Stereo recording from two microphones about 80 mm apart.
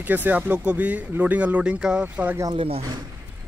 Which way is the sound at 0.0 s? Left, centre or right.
Right.